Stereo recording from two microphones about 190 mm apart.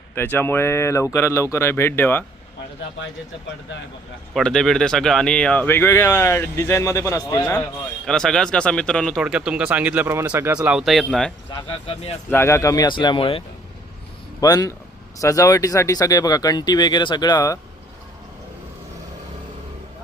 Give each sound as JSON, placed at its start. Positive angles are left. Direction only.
{"t": 0.1, "sound": "speech", "side_deg": 10}
{"t": 4.4, "sound": "speech", "side_deg": 5}
{"t": 8.0, "sound": "speech", "side_deg": 5}
{"t": 11.5, "sound": "speech", "side_deg": 30}
{"t": 12.3, "sound": "speech", "side_deg": 15}
{"t": 14.4, "sound": "speech", "side_deg": 20}